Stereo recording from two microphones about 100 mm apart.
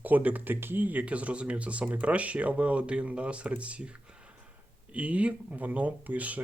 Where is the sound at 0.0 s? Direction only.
15° right (ahead or behind).